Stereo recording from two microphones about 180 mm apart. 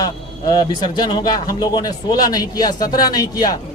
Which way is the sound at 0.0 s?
20° left (ahead or behind).